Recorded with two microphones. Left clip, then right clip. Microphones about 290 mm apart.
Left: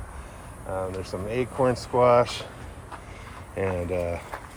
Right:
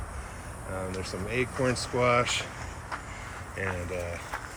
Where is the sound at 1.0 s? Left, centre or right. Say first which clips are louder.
Left 2 dB; centre.